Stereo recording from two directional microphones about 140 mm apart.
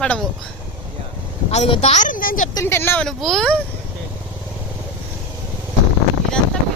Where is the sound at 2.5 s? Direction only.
15° left (ahead or behind).